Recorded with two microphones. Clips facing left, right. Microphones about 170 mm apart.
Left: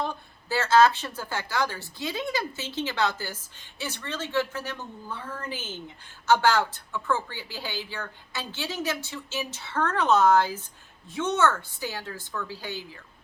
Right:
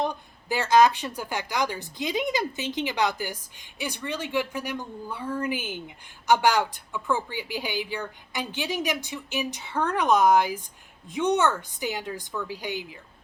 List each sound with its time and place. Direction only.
0.0 s a woman's voice: 15° right (ahead or behind)